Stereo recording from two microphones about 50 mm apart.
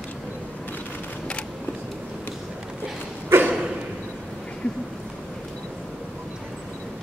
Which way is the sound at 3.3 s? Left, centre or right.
Right.